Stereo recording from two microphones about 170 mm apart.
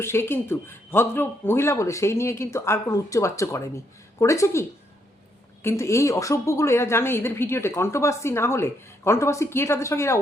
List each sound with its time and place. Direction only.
0.0 s a woman's voice: 15° left (ahead or behind)
5.6 s a woman's voice: 15° left (ahead or behind)